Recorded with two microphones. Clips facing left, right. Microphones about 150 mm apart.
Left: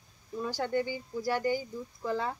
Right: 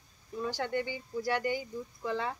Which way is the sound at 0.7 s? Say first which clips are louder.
Left 3 dB; 40° left (ahead or behind).